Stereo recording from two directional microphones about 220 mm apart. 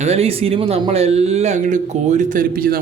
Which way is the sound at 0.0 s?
30° right (ahead or behind).